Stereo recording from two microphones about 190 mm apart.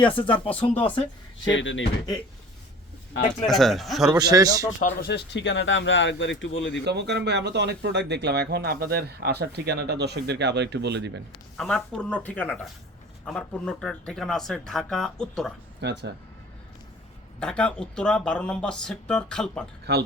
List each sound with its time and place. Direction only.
0.3 s speech: 30° left (ahead or behind)
1.5 s speech: 80° left
3.4 s speech: centre (ahead or behind)
4.1 s a man's voice: 20° right (ahead or behind)
4.8 s speech: 45° left (ahead or behind); by 6.8 s 75° left (ahead or behind)
6.8 s speech: 60° right (ahead or behind)
11.5 s speech: 5° left (ahead or behind)
15.8 s speech: 65° right (ahead or behind)
17.4 s speech: 5° left (ahead or behind)
19.8 s speech: 60° right (ahead or behind)